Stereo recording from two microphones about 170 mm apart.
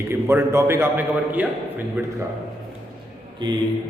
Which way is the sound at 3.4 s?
25° right (ahead or behind).